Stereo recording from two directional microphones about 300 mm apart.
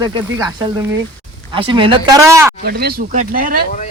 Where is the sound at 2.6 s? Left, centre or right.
Right.